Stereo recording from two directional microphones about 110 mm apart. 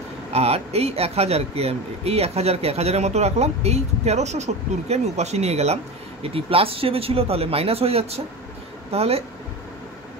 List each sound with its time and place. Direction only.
0.3 s speech: 70° right (ahead or behind)
6.2 s speech: 60° right (ahead or behind)